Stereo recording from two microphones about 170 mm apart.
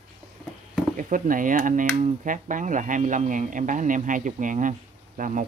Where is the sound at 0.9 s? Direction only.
50° right (ahead or behind).